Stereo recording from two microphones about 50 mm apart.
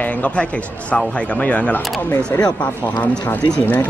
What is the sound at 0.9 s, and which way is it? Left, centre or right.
Speech, left.